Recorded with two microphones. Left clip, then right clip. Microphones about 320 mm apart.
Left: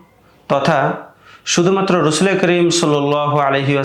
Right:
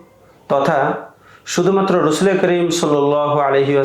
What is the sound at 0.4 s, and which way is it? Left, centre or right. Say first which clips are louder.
Speech: even; left.